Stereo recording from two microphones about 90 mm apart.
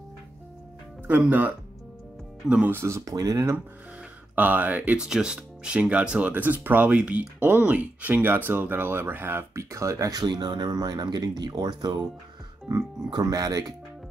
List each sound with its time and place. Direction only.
1.0 s speech: 20° right (ahead or behind)
2.7 s speech: 30° right (ahead or behind)
4.4 s speech: 20° right (ahead or behind); by 13.7 s 40° right (ahead or behind)